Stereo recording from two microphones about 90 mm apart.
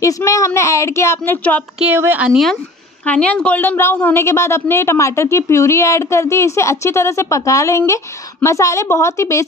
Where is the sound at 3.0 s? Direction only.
15° left (ahead or behind).